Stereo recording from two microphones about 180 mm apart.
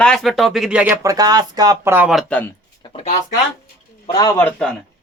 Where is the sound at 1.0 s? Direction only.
20° right (ahead or behind).